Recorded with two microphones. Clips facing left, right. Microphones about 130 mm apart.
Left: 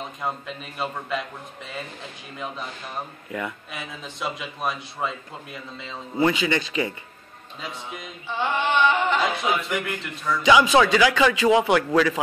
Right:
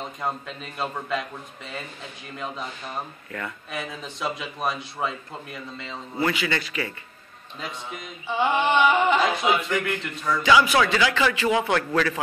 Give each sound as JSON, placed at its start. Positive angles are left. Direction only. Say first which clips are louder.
{"t": 0.2, "sound": "a man's voice", "louder": "even", "side_deg": 0}
{"t": 2.3, "sound": "a man's voice", "louder": "even", "side_deg": 0}
{"t": 3.3, "sound": "a man's voice", "louder": "left 4 dB", "side_deg": 15}
{"t": 3.7, "sound": "a man's voice", "louder": "right 3 dB", "side_deg": 0}
{"t": 6.1, "sound": "a man's voice", "louder": "left 4 dB", "side_deg": 20}
{"t": 8.3, "sound": "a sound", "louder": "right 2 dB", "side_deg": -15}
{"t": 9.2, "sound": "a man's voice", "louder": "right 2 dB", "side_deg": 5}
{"t": 10.4, "sound": "a man's voice", "louder": "left 3 dB", "side_deg": 20}